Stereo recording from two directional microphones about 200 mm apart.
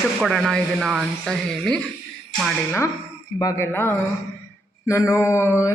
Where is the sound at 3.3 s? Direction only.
15° left (ahead or behind).